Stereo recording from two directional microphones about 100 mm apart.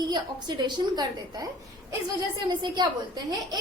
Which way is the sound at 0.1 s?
45° right (ahead or behind).